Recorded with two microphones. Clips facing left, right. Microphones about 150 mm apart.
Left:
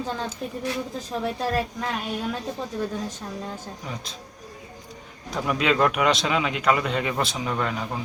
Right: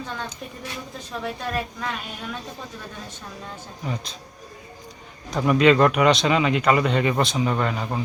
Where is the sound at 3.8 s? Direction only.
Centre (ahead or behind).